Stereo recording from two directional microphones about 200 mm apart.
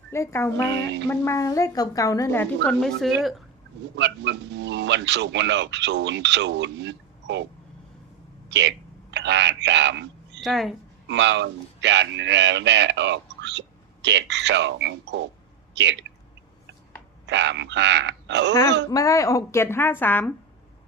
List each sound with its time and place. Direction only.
0.1 s a woman's voice: 15° left (ahead or behind)
0.7 s speech: 60° right (ahead or behind)
1.0 s a woman's voice: 10° left (ahead or behind)
2.6 s speech: centre (ahead or behind)
3.9 s speech: 60° right (ahead or behind)
8.4 s speech: 60° right (ahead or behind)
10.4 s speech: centre (ahead or behind)
11.1 s speech: 60° right (ahead or behind)
17.2 s speech: 60° right (ahead or behind)
18.9 s a woman's voice: 15° left (ahead or behind)